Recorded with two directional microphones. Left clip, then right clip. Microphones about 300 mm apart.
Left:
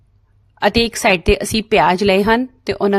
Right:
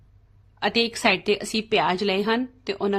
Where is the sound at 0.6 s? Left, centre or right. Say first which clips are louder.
Left 7 dB; left.